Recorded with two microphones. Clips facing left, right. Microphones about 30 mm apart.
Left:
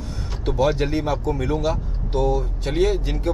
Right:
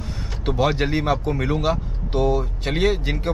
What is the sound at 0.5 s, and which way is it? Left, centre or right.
Speech, right.